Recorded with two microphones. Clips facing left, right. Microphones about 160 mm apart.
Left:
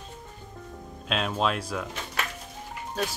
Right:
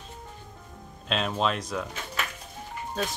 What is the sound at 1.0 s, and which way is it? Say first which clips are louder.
Music: even; centre (ahead or behind).